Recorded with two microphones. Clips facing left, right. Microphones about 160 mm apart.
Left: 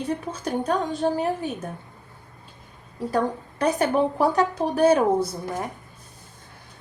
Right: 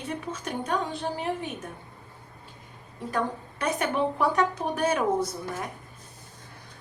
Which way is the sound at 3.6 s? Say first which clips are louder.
Left 5 dB; 35° left (ahead or behind).